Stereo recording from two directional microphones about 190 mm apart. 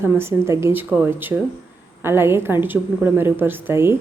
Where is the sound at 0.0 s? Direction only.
10° right (ahead or behind).